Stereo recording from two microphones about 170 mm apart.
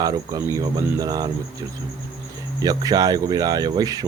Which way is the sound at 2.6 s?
20° right (ahead or behind).